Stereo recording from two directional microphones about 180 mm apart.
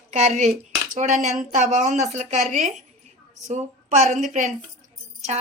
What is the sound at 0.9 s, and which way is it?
Speech, 40° right (ahead or behind).